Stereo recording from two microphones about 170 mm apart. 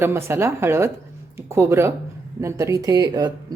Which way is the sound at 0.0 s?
15° right (ahead or behind).